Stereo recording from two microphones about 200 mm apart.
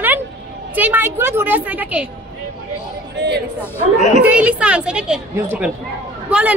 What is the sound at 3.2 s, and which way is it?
Chatter, 60° right (ahead or behind).